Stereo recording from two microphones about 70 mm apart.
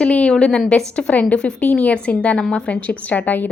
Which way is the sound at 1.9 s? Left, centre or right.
Centre.